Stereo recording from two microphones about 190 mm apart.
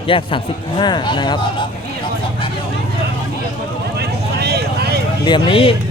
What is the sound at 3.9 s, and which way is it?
Vehicle, 60° right (ahead or behind).